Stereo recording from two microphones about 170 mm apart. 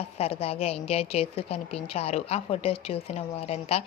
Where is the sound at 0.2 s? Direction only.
35° left (ahead or behind).